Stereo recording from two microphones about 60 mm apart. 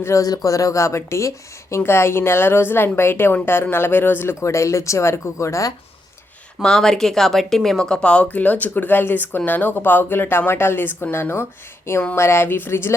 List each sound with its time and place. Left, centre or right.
0.2 s a woman's voice: left
4.4 s speech: left
6.6 s a woman's voice: centre; by 12.9 s left